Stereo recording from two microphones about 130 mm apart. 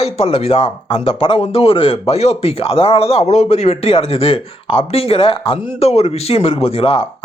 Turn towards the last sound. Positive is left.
turn(degrees=45)  # may be behind; listen again after turning